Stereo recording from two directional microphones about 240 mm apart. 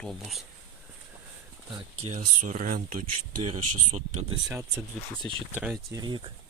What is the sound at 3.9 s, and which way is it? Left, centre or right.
Speech, right.